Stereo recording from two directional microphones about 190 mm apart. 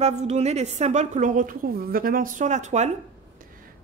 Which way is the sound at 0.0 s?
35° right (ahead or behind).